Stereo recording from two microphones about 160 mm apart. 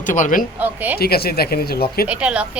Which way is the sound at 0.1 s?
55° left (ahead or behind).